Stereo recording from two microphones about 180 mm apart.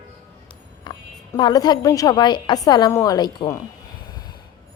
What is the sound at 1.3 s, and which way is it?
A woman's voice, 25° left (ahead or behind).